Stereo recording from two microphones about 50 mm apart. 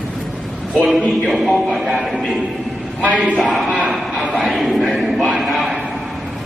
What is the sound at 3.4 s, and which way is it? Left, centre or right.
Speech, centre.